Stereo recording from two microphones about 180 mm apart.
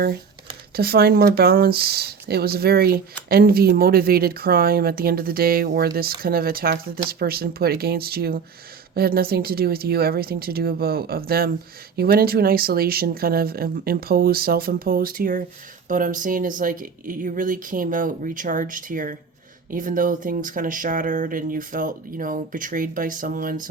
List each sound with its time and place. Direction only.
0.8 s speech: 60° right (ahead or behind)